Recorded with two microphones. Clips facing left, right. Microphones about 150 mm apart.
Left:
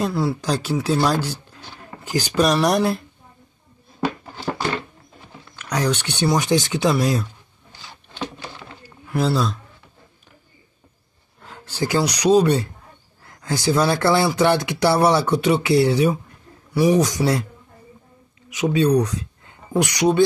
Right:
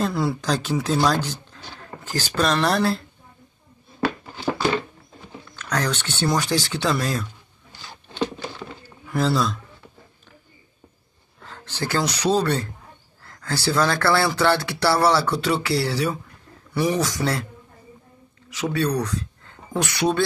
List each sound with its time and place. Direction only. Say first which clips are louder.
0.0 s speech: left 1 dB; 5° left (ahead or behind)
5.6 s speech: left 3 dB; 10° left (ahead or behind)
9.0 s a man's voice: left 1 dB; 5° left (ahead or behind)
11.4 s speech: left 4 dB; 10° left (ahead or behind)
18.5 s speech: left 6 dB; 15° left (ahead or behind)